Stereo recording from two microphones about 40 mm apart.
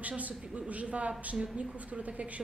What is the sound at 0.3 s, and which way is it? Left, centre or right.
Speech, right.